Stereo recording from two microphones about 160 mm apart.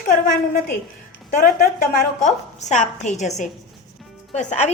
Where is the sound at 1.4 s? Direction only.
70° left (ahead or behind).